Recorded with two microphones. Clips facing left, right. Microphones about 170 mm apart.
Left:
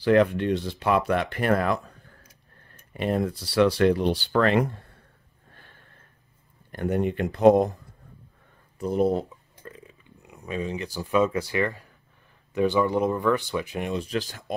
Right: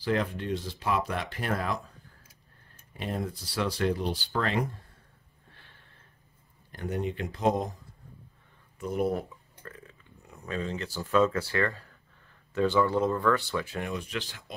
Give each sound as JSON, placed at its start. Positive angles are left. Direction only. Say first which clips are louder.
{"t": 0.0, "sound": "speech", "louder": "left 9 dB", "side_deg": 70}
{"t": 5.5, "sound": "a sound", "louder": "left 4 dB", "side_deg": 45}
{"t": 6.7, "sound": "speech", "louder": "left 7 dB", "side_deg": 60}
{"t": 8.7, "sound": "speech", "louder": "left 6 dB", "side_deg": 30}
{"t": 9.6, "sound": "speech", "louder": "left 3 dB", "side_deg": 15}
{"t": 14.0, "sound": "speech", "louder": "left 7 dB", "side_deg": 40}